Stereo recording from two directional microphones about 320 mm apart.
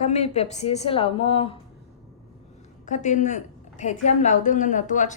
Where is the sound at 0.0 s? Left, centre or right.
Centre.